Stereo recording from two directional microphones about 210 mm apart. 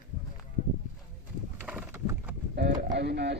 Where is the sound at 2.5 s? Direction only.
50° right (ahead or behind).